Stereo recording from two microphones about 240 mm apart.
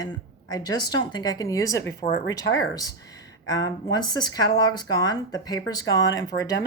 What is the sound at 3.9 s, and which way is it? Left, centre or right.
Speech, centre.